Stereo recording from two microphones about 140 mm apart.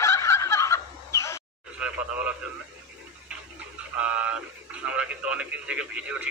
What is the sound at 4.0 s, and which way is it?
Speech, 10° right (ahead or behind).